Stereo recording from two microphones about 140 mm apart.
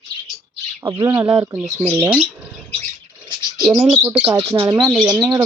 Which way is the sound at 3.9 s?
15° right (ahead or behind).